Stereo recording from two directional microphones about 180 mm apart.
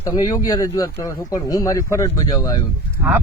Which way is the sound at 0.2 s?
20° left (ahead or behind).